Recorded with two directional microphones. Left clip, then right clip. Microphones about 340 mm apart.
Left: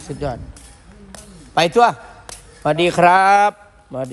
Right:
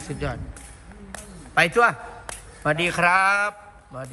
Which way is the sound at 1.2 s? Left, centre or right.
Centre.